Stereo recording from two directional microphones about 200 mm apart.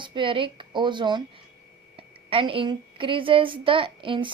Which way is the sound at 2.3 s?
25° right (ahead or behind).